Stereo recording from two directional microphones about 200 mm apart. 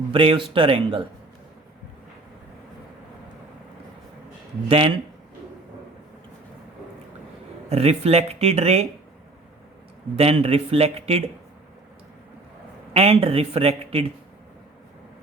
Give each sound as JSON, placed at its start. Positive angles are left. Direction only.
{"t": 0.1, "sound": "speech", "side_deg": -25}
{"t": 4.7, "sound": "speech", "side_deg": -30}
{"t": 7.7, "sound": "speech", "side_deg": -30}
{"t": 10.2, "sound": "speech", "side_deg": -30}
{"t": 12.9, "sound": "speech", "side_deg": -30}